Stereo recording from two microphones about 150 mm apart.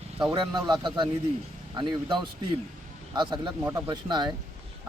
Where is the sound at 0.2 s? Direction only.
25° right (ahead or behind).